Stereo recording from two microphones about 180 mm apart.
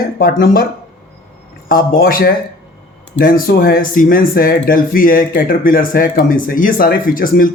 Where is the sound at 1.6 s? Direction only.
55° left (ahead or behind).